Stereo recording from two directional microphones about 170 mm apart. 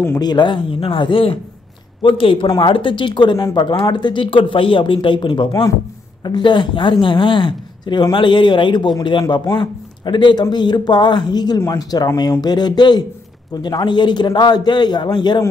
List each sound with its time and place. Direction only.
0.0 s speech: 15° left (ahead or behind)
0.3 s a woman's voice: 30° left (ahead or behind)